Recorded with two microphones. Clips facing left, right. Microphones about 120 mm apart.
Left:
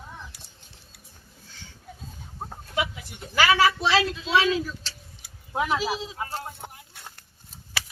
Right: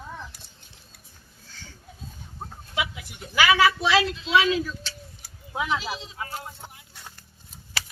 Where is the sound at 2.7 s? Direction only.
40° left (ahead or behind).